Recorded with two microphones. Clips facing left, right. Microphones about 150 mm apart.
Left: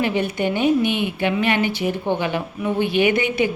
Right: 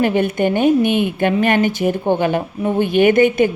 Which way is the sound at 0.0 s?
50° right (ahead or behind).